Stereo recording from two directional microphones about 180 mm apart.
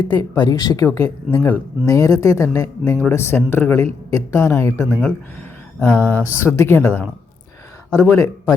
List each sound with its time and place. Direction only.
0.0 s speech: 25° left (ahead or behind)
4.9 s speech: centre (ahead or behind)
8.1 s speech: 15° left (ahead or behind)